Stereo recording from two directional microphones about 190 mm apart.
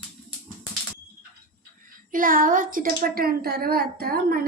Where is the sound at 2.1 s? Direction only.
45° right (ahead or behind).